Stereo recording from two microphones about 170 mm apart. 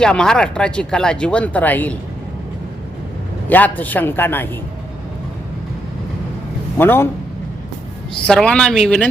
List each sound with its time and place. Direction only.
0.0 s speech: 5° left (ahead or behind)
3.5 s a man's voice: 10° left (ahead or behind)
6.7 s a man's voice: 10° left (ahead or behind)
8.3 s speech: 5° left (ahead or behind)